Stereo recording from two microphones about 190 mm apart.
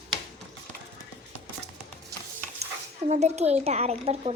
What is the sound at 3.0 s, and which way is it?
Speech, 35° right (ahead or behind).